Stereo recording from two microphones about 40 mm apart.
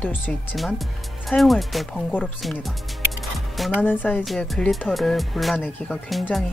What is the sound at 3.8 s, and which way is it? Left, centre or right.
Speech, left.